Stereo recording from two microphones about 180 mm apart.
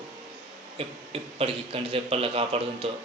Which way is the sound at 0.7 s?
30° right (ahead or behind).